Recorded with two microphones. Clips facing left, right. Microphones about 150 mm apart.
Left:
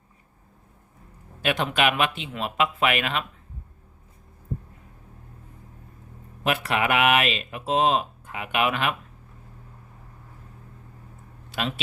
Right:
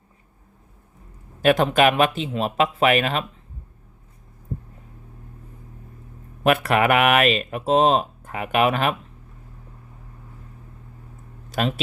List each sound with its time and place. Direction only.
1.4 s speech: 45° right (ahead or behind)
6.4 s speech: 50° right (ahead or behind)
11.4 s a sound: 45° right (ahead or behind)